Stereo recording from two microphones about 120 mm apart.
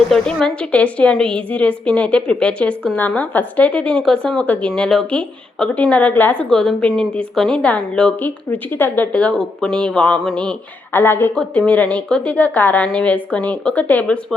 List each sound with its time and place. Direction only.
0.1 s a woman's voice: 5° left (ahead or behind)
10.9 s a woman's voice: 20° left (ahead or behind)